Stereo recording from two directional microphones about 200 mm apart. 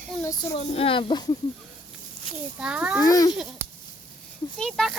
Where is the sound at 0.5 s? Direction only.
30° left (ahead or behind).